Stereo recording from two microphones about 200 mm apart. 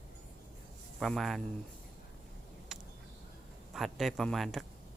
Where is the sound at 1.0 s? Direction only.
Centre (ahead or behind).